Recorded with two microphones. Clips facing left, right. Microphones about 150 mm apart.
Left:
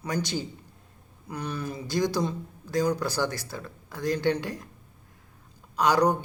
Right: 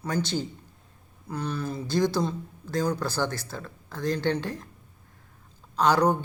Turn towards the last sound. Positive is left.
turn(degrees=15)  # may be behind; listen again after turning